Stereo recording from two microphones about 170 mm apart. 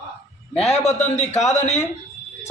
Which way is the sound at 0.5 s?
40° left (ahead or behind).